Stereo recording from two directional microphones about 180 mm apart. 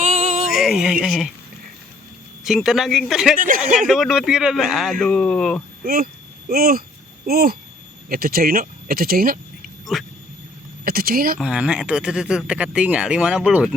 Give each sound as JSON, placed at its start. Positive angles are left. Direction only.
{"t": 0.0, "sound": "music", "side_deg": -40}
{"t": 0.4, "sound": "music", "side_deg": -5}
{"t": 2.4, "sound": "speech", "side_deg": 0}
{"t": 3.3, "sound": "speech", "side_deg": -50}
{"t": 3.8, "sound": "speech", "side_deg": 0}
{"t": 5.8, "sound": "speech", "side_deg": -55}
{"t": 9.9, "sound": "speech", "side_deg": 0}
{"t": 10.8, "sound": "speech", "side_deg": -55}
{"t": 11.3, "sound": "speech", "side_deg": -5}